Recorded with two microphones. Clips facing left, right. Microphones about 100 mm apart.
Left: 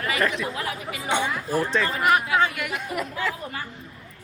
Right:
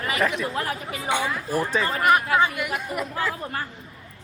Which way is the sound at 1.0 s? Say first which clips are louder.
Even; 20° left (ahead or behind).